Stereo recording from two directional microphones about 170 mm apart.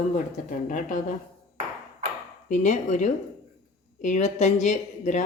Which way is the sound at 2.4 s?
45° left (ahead or behind).